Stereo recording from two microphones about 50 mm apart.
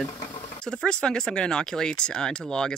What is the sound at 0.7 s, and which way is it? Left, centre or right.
Speech, centre.